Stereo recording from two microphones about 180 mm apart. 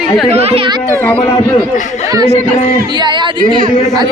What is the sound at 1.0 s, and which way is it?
Speech, 10° left (ahead or behind).